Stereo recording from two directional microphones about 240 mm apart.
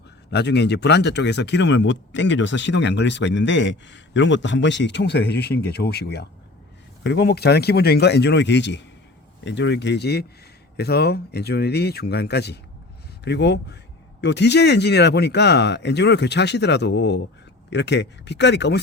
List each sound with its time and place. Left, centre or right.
0.3 s speech: left